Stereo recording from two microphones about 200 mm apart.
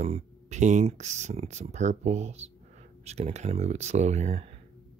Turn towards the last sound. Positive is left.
turn(degrees=-35)  # may be behind; listen again after turning